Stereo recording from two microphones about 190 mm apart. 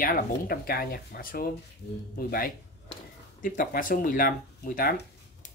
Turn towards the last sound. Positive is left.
turn(degrees=50)  # may be behind; listen again after turning